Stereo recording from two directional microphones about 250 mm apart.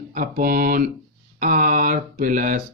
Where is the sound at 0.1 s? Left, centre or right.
Right.